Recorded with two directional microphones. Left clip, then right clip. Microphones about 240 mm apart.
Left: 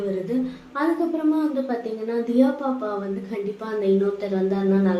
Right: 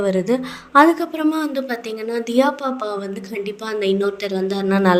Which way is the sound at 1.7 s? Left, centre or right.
Right.